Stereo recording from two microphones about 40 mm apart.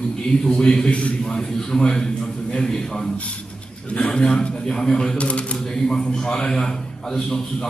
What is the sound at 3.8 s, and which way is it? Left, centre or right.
A man's voice, left.